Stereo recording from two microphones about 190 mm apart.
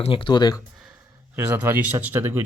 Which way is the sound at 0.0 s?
25° left (ahead or behind).